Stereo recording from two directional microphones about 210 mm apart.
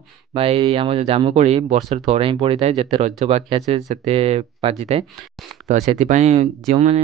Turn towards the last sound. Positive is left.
turn(degrees=-30)  # may be behind; listen again after turning